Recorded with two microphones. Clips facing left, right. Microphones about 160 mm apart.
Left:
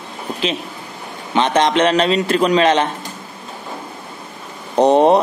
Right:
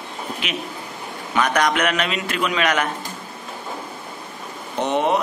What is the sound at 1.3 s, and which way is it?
A man's voice, 25° left (ahead or behind).